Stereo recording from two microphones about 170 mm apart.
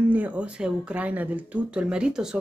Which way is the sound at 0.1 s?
10° right (ahead or behind).